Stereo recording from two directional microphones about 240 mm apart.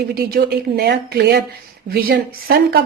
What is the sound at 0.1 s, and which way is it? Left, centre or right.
A woman's voice, right.